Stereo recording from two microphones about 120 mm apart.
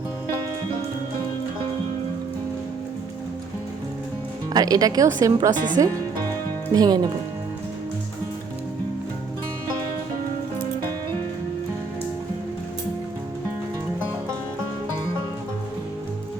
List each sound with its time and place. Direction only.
4.5 s a woman's voice: 30° right (ahead or behind)